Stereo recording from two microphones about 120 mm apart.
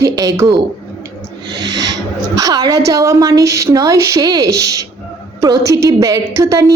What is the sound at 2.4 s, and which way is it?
A woman's voice, 35° right (ahead or behind).